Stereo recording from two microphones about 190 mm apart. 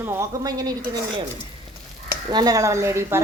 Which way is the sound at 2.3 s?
20° right (ahead or behind).